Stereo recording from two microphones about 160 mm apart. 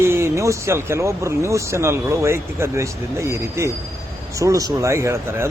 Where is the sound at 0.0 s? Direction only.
15° right (ahead or behind).